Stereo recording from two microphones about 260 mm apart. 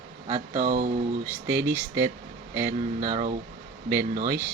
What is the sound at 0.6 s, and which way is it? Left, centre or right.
Speech, right.